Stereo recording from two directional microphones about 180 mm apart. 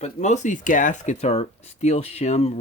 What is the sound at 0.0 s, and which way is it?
Speech, 40° left (ahead or behind).